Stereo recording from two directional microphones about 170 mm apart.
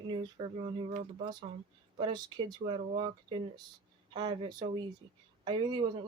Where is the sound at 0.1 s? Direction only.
30° right (ahead or behind).